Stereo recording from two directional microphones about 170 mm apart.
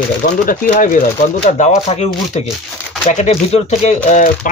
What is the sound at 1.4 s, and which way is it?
Speech, 40° left (ahead or behind).